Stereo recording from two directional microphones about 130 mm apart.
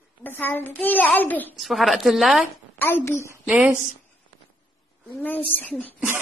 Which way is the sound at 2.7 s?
15° left (ahead or behind).